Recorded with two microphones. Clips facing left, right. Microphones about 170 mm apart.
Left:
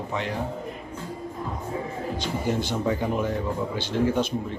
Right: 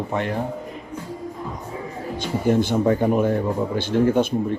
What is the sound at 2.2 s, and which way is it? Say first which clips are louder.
Speech: right 8 dB; 55° right (ahead or behind).